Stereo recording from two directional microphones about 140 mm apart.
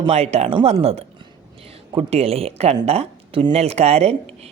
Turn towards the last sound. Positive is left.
turn(degrees=-45)  # may be behind; listen again after turning